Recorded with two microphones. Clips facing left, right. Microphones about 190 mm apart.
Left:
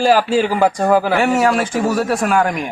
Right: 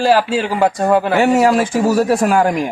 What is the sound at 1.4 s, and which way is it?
A man's voice, 30° right (ahead or behind).